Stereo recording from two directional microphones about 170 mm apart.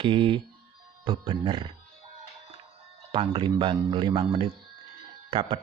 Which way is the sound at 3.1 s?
30° right (ahead or behind).